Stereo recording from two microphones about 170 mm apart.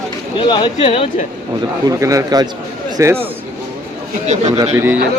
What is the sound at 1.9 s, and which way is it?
Speech, 20° right (ahead or behind).